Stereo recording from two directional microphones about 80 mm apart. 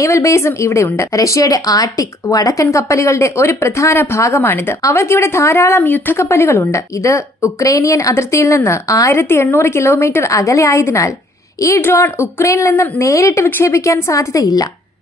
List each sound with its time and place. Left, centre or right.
0.0 s a woman's voice: left